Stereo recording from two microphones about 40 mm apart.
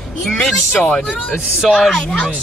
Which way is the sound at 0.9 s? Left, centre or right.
Left.